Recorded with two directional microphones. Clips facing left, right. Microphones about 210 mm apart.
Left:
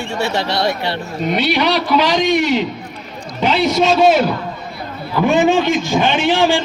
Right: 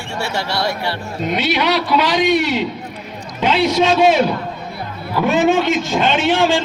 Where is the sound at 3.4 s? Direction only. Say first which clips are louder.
Even; 10° left (ahead or behind).